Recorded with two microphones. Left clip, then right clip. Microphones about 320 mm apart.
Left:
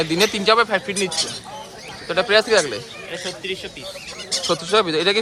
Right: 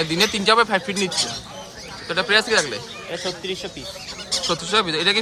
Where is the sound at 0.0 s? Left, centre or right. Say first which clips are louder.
Left 1 dB; centre.